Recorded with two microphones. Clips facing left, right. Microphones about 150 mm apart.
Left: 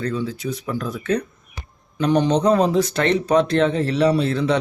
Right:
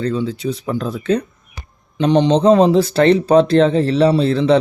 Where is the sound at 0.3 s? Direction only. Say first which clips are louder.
Right 5 dB; 30° right (ahead or behind).